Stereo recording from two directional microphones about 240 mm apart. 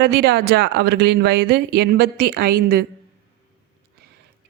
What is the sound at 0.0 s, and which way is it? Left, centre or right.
Speech, right.